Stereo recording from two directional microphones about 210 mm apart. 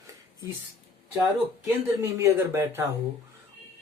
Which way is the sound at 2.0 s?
15° right (ahead or behind).